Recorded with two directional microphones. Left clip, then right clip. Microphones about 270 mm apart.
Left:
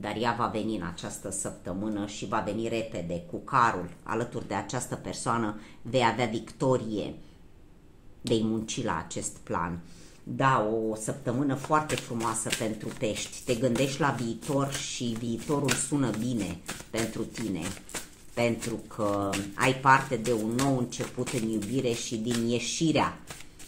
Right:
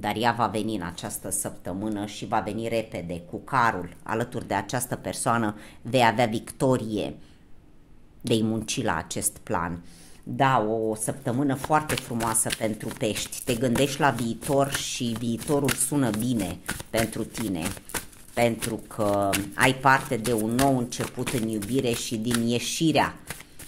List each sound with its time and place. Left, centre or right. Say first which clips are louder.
0.0 s speech: right 5 dB; right
8.3 s speech: right 3 dB; right